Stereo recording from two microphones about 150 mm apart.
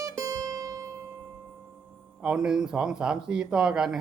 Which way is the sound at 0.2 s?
25° right (ahead or behind).